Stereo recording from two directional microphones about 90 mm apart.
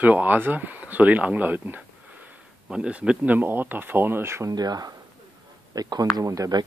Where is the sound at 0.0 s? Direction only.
20° right (ahead or behind).